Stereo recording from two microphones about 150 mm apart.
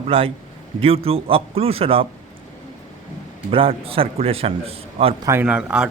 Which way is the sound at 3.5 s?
40° right (ahead or behind).